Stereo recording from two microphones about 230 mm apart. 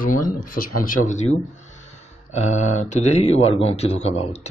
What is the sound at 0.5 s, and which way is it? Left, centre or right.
Speech, left.